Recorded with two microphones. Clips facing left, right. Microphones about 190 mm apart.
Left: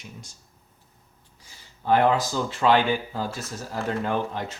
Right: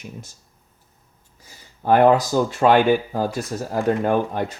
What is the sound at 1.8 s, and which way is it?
Speech, 50° right (ahead or behind).